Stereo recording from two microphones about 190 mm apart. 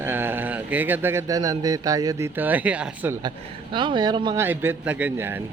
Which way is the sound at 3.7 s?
25° right (ahead or behind).